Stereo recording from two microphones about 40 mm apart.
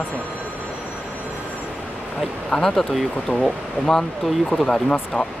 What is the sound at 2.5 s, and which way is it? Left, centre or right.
Speech, centre.